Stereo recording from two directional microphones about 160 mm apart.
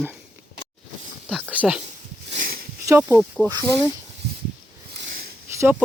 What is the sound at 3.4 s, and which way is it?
Speech, 15° left (ahead or behind).